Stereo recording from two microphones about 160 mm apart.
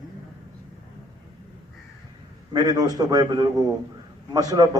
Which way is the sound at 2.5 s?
25° right (ahead or behind).